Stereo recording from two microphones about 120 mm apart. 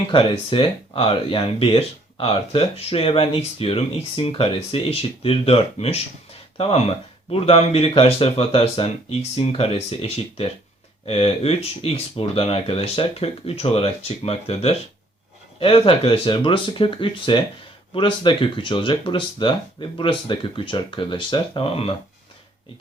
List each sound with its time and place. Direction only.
0.1 s speech: 45° left (ahead or behind)